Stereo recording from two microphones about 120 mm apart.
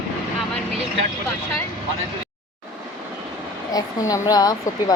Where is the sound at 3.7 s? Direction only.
30° left (ahead or behind).